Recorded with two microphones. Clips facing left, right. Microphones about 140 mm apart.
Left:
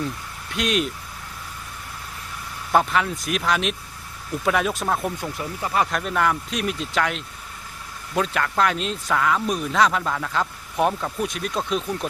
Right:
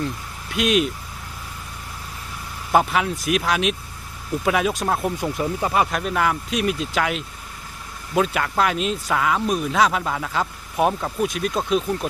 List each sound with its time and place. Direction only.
0.5 s speech: 5° right (ahead or behind)
2.7 s speech: 10° right (ahead or behind)
5.2 s speech: 20° right (ahead or behind)
5.8 s speech: 5° right (ahead or behind)